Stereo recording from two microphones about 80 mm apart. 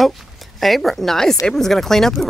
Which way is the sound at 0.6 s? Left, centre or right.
Centre.